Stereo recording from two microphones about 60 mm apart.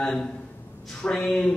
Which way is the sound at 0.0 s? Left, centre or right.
Centre.